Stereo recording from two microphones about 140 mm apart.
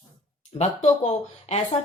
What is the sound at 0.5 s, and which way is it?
A woman's voice, 50° left (ahead or behind).